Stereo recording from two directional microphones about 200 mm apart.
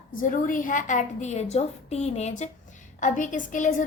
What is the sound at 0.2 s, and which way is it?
A woman's voice, 45° left (ahead or behind).